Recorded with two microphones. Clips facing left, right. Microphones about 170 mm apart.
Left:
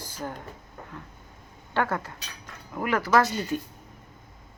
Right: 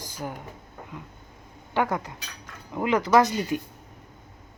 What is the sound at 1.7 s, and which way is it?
Speech, 15° right (ahead or behind).